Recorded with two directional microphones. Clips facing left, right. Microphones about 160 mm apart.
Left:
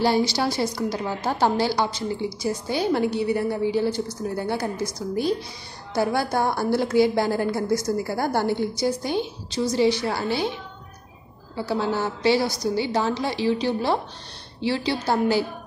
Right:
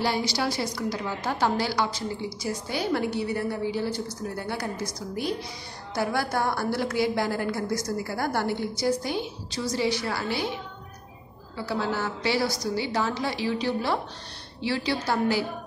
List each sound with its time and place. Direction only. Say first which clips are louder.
0.0 s a woman's voice: left 5 dB; 30° left (ahead or behind)
11.5 s a woman's voice: left 4 dB; 25° left (ahead or behind)